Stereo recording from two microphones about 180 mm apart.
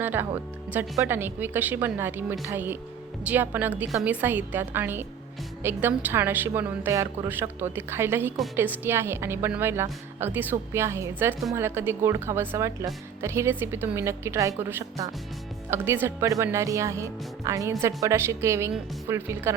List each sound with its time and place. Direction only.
0.0 s speech: 10° right (ahead or behind)